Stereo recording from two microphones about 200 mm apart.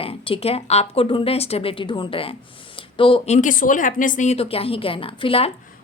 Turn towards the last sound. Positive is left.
turn(degrees=30)  # may be behind; listen again after turning